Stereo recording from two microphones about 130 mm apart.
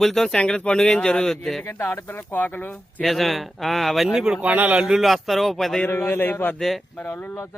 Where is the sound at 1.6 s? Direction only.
20° left (ahead or behind).